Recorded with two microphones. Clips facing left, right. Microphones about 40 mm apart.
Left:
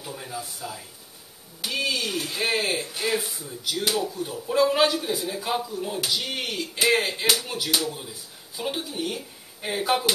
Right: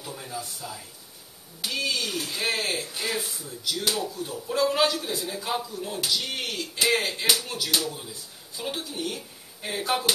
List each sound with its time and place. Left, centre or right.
0.0 s speech: centre